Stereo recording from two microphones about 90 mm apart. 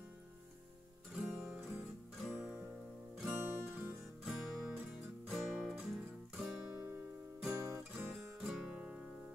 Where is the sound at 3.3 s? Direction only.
25° right (ahead or behind).